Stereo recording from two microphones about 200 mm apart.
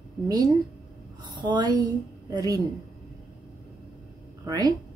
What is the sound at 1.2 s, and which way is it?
A woman's voice, 20° right (ahead or behind).